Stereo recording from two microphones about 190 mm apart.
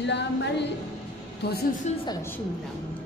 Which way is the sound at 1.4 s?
60° left (ahead or behind).